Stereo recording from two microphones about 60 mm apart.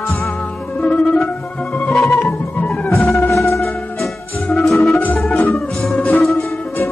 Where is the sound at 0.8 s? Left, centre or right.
Centre.